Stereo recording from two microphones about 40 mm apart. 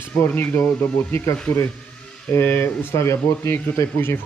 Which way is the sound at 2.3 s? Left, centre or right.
Left.